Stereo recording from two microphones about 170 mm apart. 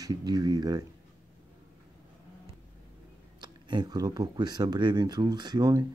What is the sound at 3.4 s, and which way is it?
Speech, 25° right (ahead or behind).